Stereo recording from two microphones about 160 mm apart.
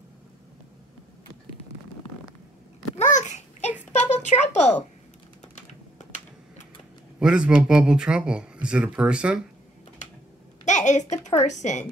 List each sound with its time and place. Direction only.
3.0 s babbling: 50° left (ahead or behind)
3.8 s a sound: 45° left (ahead or behind)
7.2 s speech: 5° right (ahead or behind)
10.6 s a woman's voice: 50° left (ahead or behind)